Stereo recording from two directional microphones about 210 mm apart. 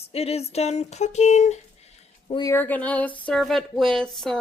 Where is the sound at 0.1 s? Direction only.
30° left (ahead or behind).